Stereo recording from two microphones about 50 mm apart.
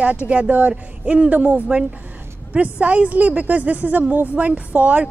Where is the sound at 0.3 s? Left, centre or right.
Right.